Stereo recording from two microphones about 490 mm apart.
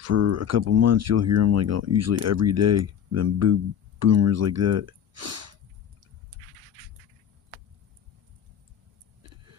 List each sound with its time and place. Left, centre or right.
0.0 s speech: right
6.3 s pant: right
9.2 s vehicle: right